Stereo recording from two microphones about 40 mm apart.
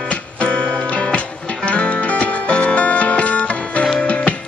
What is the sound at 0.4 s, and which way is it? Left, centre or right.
Music, left.